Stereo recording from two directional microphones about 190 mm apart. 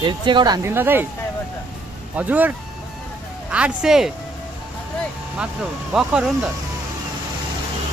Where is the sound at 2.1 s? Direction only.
10° right (ahead or behind).